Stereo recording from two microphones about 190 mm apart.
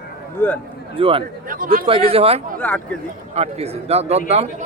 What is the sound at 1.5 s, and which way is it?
Speech, 45° right (ahead or behind).